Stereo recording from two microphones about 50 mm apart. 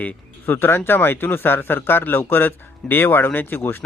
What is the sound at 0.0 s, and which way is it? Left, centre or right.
Speech, left.